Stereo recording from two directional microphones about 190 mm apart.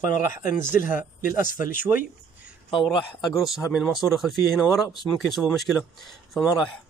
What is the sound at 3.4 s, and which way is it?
Speech, centre (ahead or behind).